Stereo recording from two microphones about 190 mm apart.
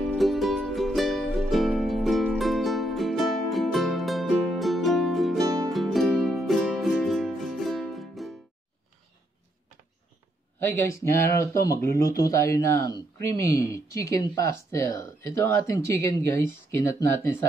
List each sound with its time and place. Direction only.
0.0 s music: centre (ahead or behind)
11.1 s a man's voice: 15° left (ahead or behind)